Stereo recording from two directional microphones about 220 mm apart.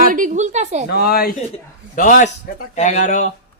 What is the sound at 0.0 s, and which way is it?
Speech, 40° right (ahead or behind).